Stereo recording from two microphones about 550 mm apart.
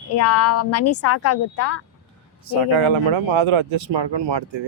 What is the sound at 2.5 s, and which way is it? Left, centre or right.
A man's voice, right.